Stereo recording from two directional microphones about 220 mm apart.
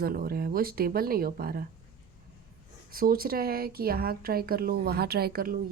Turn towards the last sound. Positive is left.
turn(degrees=-40)  # may be behind; listen again after turning